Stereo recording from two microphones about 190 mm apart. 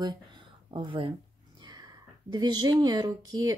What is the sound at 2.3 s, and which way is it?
Speech, 20° right (ahead or behind).